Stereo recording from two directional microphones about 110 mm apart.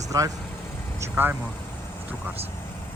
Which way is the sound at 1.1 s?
20° right (ahead or behind).